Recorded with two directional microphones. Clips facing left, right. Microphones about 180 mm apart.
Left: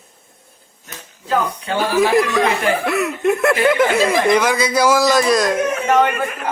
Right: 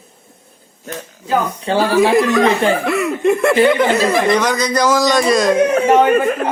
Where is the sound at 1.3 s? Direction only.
30° right (ahead or behind).